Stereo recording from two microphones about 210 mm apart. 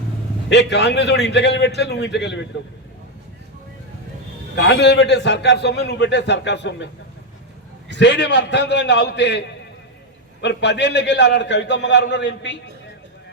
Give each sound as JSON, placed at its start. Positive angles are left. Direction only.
{"t": 0.5, "sound": "a man's voice", "side_deg": 55}
{"t": 4.5, "sound": "a man's voice", "side_deg": 55}
{"t": 7.9, "sound": "a man's voice", "side_deg": 55}